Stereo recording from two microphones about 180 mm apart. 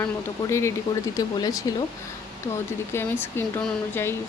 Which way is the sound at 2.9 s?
10° left (ahead or behind).